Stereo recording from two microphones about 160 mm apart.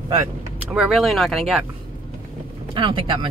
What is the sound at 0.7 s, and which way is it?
Speech, 5° right (ahead or behind).